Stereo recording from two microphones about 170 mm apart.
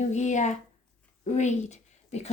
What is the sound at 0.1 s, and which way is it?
Speech, 45° left (ahead or behind).